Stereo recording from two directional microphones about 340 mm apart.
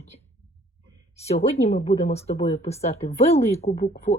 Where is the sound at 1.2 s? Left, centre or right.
Centre.